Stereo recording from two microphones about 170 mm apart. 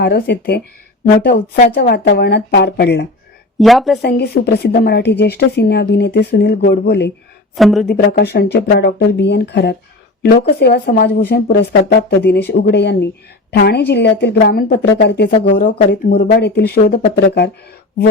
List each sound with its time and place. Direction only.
0.0 s a woman's voice: 70° left (ahead or behind)
1.0 s a woman's voice: 60° left (ahead or behind)
1.7 s a woman's voice: 75° left (ahead or behind)
3.6 s speech: centre (ahead or behind)
4.0 s a woman's voice: 70° left (ahead or behind)
7.5 s speech: centre (ahead or behind)
7.9 s a woman's voice: 65° left (ahead or behind)
10.2 s a woman's voice: 65° left (ahead or behind); by 13.1 s 90° left
13.6 s a woman's voice: 70° left (ahead or behind)